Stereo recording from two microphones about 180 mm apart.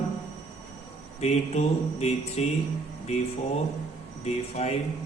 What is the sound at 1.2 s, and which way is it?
A man's voice, 35° left (ahead or behind).